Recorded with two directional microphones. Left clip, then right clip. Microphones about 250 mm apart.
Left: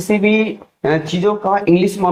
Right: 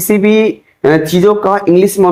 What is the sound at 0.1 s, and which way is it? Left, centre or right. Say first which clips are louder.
Speech: right 6 dB; right.